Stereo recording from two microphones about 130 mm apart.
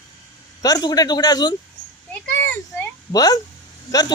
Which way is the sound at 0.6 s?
30° left (ahead or behind).